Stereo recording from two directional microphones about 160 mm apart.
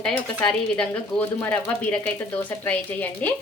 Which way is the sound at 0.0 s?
5° left (ahead or behind).